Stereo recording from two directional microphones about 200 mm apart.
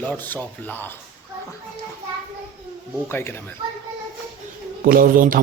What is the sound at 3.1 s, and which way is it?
Speech, 10° left (ahead or behind).